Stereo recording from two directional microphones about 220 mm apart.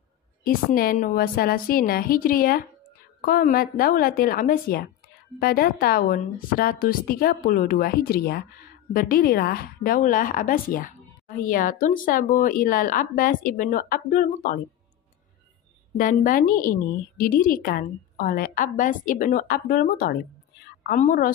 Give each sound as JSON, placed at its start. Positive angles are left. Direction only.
{"t": 0.4, "sound": "speech", "side_deg": 40}
{"t": 16.0, "sound": "speech", "side_deg": 40}